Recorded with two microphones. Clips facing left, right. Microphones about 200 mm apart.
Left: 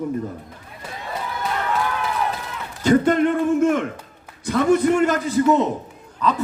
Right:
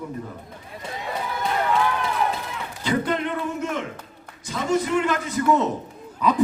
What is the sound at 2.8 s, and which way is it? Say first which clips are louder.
Speech: left 8 dB; 45° left (ahead or behind).